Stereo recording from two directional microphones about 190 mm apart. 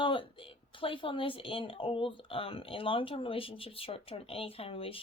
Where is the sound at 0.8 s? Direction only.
25° left (ahead or behind).